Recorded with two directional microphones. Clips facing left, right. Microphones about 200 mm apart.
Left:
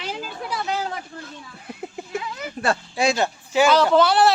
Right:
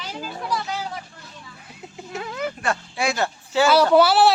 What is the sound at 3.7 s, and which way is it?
Speech, 10° right (ahead or behind).